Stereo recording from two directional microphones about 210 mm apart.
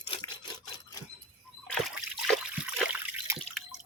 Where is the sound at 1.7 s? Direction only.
Centre (ahead or behind).